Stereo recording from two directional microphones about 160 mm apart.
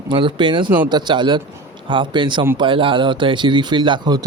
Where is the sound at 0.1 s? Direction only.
30° right (ahead or behind).